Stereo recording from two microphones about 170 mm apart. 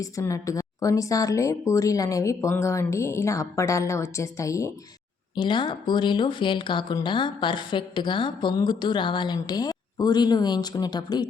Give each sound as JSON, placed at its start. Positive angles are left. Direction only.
{"t": 0.0, "sound": "a woman's voice", "side_deg": 20}